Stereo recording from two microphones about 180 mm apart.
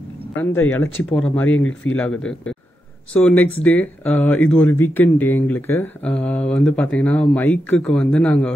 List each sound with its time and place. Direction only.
0.4 s speech: 10° left (ahead or behind)